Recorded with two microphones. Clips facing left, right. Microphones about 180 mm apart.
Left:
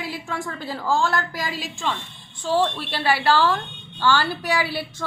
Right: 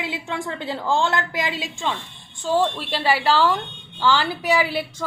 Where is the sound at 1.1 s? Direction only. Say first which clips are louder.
Right 2 dB; 20° right (ahead or behind).